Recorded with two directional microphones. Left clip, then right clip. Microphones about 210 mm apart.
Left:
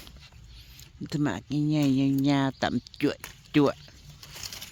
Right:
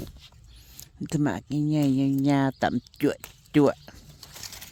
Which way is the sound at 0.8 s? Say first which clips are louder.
Right 2 dB; 30° right (ahead or behind).